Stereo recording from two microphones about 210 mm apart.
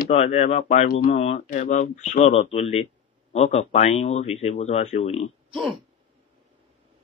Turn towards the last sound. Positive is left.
turn(degrees=0)  # may be behind; listen again after turning